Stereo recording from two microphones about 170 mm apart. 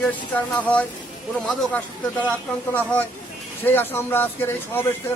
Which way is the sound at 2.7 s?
10° left (ahead or behind).